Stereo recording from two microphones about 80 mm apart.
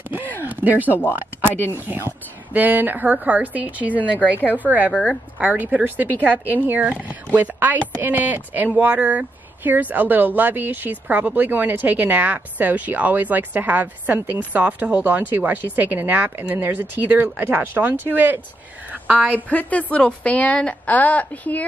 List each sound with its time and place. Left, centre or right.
0.4 s a sound: right
1.4 s speech: right
4.0 s a woman's voice: left
4.6 s a woman's voice: right
19.5 s a woman's voice: centre